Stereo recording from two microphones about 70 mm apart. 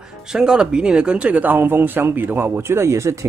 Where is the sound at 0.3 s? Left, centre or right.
Centre.